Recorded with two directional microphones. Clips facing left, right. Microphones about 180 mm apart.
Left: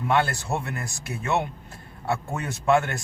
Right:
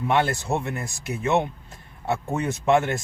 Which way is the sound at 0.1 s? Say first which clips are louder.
Right 1 dB; 20° right (ahead or behind).